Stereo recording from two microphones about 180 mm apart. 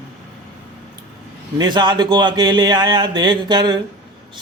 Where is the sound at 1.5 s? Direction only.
25° right (ahead or behind).